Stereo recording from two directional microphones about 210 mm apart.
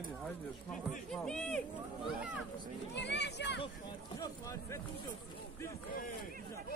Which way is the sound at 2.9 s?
55° left (ahead or behind).